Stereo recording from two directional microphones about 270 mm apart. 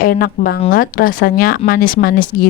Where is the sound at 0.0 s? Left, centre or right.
Left.